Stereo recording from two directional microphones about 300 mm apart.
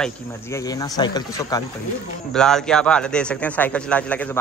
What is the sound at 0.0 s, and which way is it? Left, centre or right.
Speech, centre.